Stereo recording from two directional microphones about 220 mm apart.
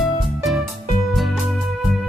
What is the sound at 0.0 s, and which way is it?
Music, centre (ahead or behind).